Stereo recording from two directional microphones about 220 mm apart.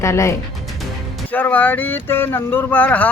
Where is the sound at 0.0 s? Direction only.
15° left (ahead or behind).